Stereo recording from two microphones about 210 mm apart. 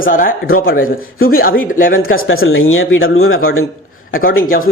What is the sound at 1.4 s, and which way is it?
Speech, 45° left (ahead or behind).